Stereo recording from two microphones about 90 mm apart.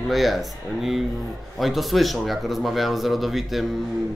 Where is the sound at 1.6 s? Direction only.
Centre (ahead or behind).